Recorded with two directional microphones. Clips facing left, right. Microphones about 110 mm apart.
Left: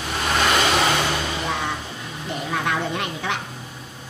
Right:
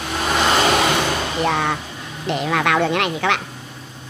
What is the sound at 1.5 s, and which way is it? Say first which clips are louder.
Speech: right 8 dB; 65° right (ahead or behind).